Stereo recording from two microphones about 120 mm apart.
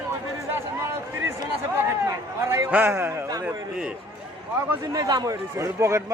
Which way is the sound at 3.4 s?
10° right (ahead or behind).